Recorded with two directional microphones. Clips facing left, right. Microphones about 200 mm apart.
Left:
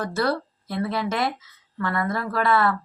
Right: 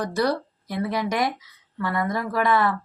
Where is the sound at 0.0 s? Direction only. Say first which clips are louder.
Right 1 dB; 15° right (ahead or behind).